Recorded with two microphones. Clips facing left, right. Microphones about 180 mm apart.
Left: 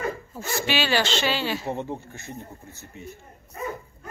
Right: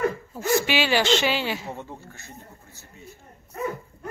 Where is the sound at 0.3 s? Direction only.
15° right (ahead or behind).